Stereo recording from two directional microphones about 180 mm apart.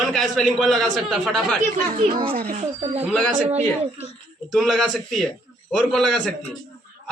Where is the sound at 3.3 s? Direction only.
40° right (ahead or behind).